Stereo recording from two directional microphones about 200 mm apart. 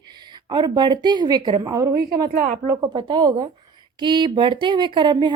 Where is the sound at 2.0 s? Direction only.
45° right (ahead or behind).